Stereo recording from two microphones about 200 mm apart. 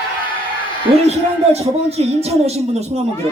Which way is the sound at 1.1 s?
30° right (ahead or behind).